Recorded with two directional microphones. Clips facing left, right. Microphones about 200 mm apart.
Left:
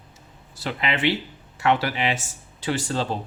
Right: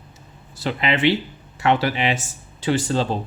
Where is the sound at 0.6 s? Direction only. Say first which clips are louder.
Right 4 dB; 20° right (ahead or behind).